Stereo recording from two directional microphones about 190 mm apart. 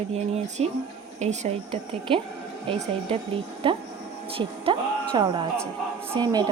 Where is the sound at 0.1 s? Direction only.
35° right (ahead or behind).